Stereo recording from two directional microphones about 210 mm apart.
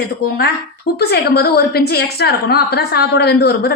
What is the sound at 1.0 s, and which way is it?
A woman's voice, 50° left (ahead or behind).